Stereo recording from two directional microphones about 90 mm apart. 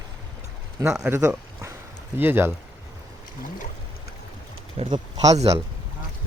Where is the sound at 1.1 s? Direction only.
20° right (ahead or behind).